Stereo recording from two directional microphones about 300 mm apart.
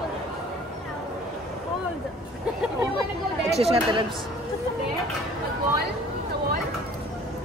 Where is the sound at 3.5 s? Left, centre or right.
Centre.